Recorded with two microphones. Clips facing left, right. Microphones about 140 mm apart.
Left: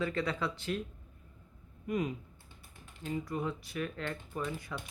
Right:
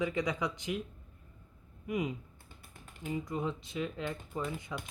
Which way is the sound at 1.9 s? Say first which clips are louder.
Left 1 dB; 15° right (ahead or behind).